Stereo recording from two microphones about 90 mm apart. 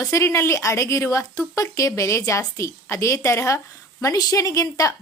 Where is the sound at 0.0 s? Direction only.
35° left (ahead or behind).